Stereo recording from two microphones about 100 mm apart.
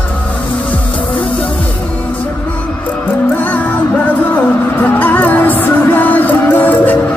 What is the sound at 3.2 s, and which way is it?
Music, 15° left (ahead or behind).